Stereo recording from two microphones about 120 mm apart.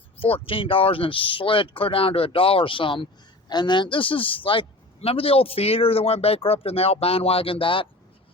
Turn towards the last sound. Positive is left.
turn(degrees=45)  # may be behind; listen again after turning